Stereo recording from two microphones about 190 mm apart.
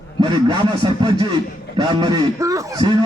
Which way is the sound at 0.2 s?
25° right (ahead or behind).